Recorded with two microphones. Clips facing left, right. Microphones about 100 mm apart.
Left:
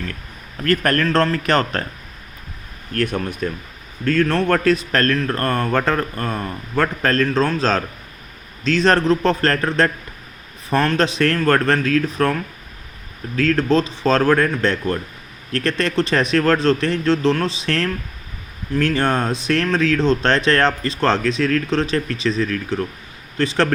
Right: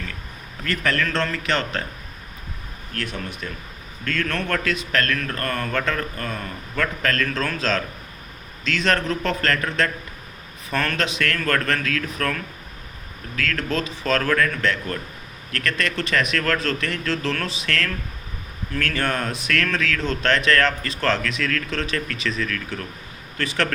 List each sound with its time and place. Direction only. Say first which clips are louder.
0.6 s speech: left 6 dB; 50° left (ahead or behind)
2.9 s speech: left 9 dB; 50° left (ahead or behind)
4.0 s speech: left 9 dB; 35° left (ahead or behind)